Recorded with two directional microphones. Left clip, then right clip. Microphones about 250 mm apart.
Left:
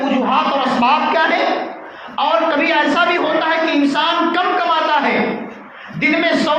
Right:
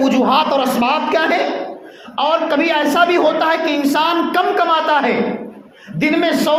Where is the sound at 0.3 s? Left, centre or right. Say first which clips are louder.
Right 1 dB; right.